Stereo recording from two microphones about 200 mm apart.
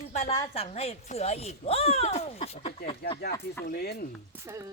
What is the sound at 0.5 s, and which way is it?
Speech, 30° left (ahead or behind).